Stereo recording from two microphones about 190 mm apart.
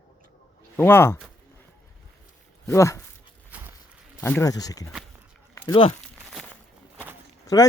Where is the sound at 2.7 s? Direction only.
15° left (ahead or behind).